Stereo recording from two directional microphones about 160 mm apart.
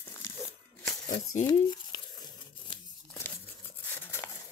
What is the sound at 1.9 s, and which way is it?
Tearing, 30° left (ahead or behind).